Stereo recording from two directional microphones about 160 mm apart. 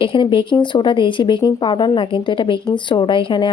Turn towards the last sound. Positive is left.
turn(degrees=30)  # may be behind; listen again after turning